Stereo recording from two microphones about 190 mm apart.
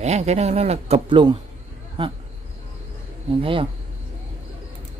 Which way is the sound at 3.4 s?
25° right (ahead or behind).